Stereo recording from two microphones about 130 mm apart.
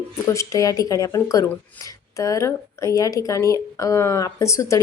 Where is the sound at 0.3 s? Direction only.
25° left (ahead or behind).